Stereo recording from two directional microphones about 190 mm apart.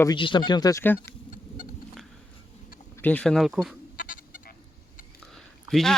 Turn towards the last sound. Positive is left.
turn(degrees=0)  # may be behind; listen again after turning